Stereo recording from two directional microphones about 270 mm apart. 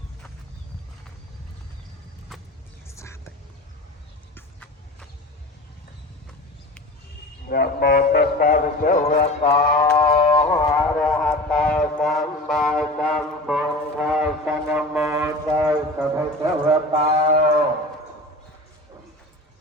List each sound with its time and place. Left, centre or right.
2.8 s whispering: centre
4.4 s vehicle: centre
7.4 s speech: left
9.5 s a sound: centre
16.6 s mantra: centre